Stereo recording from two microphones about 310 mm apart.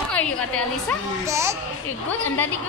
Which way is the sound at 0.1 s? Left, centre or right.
Centre.